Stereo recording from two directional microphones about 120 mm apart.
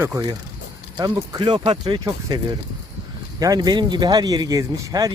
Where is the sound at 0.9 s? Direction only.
35° right (ahead or behind).